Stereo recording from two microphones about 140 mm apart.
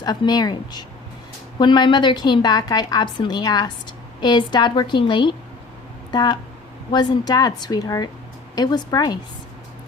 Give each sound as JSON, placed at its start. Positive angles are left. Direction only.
{"t": 0.0, "sound": "a woman's voice", "side_deg": 30}